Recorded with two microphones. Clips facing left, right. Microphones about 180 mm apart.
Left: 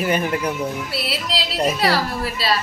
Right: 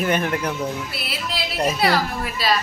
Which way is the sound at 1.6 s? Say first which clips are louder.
Even; 35° left (ahead or behind).